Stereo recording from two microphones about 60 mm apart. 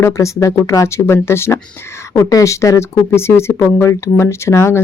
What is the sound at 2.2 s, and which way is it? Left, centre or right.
Speech, left.